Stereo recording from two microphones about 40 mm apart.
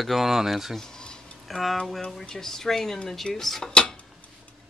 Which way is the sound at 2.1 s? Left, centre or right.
Centre.